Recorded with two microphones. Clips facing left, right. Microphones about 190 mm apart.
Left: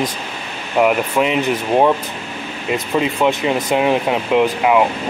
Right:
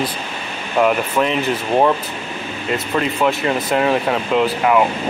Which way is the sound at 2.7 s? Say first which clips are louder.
Left 2 dB; 15° left (ahead or behind).